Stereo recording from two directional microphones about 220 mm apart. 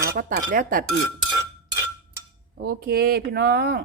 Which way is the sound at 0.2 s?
40° right (ahead or behind).